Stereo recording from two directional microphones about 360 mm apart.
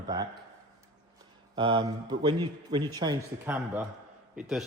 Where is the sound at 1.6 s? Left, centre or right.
Centre.